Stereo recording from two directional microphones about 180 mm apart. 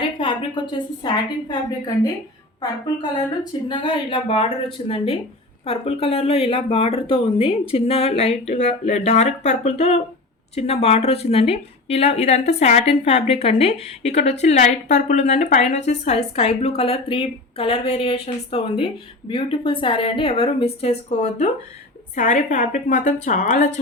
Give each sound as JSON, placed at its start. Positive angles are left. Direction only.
{"t": 0.2, "sound": "a woman's voice", "side_deg": 25}
{"t": 3.7, "sound": "a woman's voice", "side_deg": 25}